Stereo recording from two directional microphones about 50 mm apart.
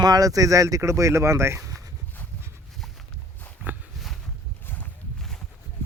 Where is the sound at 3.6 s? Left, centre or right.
Right.